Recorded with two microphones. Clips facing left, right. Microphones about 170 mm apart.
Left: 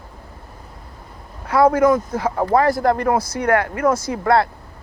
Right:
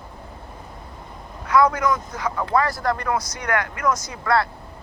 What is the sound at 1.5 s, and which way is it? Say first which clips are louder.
Speech: left 5 dB; 30° left (ahead or behind).